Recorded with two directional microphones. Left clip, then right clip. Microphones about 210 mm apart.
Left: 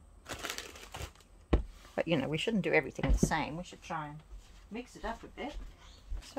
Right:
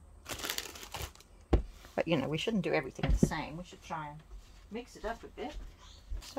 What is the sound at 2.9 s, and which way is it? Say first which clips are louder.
A woman's voice: left 2 dB; 30° left (ahead or behind).